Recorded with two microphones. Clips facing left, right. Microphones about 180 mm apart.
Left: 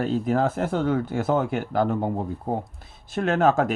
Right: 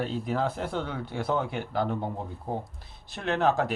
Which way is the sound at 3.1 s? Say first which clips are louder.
Left 5 dB; 45° left (ahead or behind).